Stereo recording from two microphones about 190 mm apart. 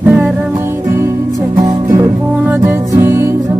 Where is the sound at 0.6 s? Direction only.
15° right (ahead or behind).